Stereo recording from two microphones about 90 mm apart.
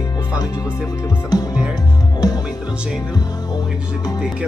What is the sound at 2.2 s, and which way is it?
Music, 45° left (ahead or behind).